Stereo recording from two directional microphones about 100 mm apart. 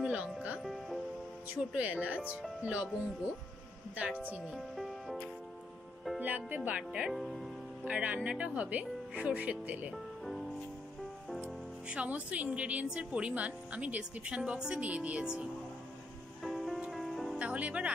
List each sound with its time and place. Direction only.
0.0 s speech: 15° right (ahead or behind)
0.7 s music: centre (ahead or behind)
1.5 s speech: 15° right (ahead or behind)
3.9 s speech: 15° right (ahead or behind)
4.6 s music: centre (ahead or behind)
6.1 s speech: 15° right (ahead or behind); by 7.4 s centre (ahead or behind)
7.8 s speech: 15° right (ahead or behind)
11.9 s speech: 10° right (ahead or behind)
16.4 s music: centre (ahead or behind)
17.4 s speech: 10° right (ahead or behind)